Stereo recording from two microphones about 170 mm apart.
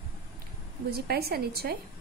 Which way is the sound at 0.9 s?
70° right (ahead or behind).